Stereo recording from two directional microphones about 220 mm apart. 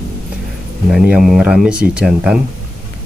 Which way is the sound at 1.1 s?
5° right (ahead or behind).